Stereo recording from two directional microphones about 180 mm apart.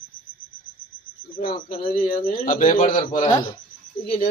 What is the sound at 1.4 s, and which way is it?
A man's voice, 45° left (ahead or behind).